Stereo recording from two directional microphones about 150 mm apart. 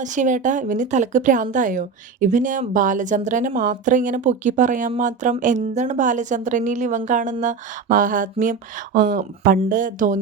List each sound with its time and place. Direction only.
0.0 s a woman's voice: 55° right (ahead or behind)